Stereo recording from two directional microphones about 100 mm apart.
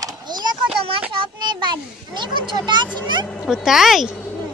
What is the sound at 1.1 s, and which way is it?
A child's voice, 50° right (ahead or behind).